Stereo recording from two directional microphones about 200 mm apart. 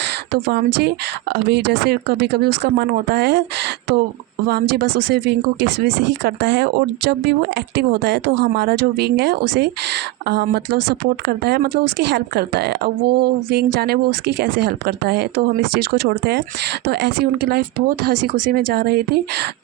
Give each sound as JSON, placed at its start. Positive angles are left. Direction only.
{"t": 0.0, "sound": "a woman's voice", "side_deg": -50}
{"t": 17.5, "sound": "a woman's voice", "side_deg": -45}